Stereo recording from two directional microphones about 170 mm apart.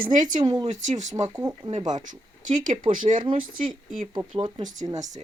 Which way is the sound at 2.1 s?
50° right (ahead or behind).